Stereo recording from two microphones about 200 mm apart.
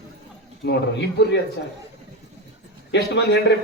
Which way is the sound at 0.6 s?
60° left (ahead or behind).